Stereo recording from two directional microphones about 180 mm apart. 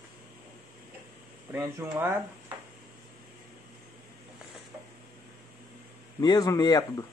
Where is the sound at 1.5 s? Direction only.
15° right (ahead or behind).